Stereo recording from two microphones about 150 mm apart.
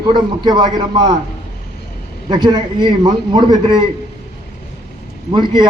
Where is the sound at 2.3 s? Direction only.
30° right (ahead or behind).